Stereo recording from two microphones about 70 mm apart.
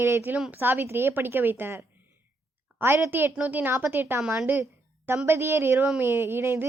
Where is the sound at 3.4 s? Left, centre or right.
Right.